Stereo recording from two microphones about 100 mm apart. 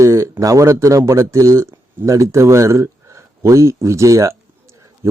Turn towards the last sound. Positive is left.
turn(degrees=-35)  # may be behind; listen again after turning